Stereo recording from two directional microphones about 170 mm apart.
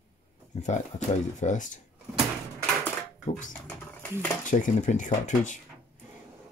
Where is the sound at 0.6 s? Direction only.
45° left (ahead or behind).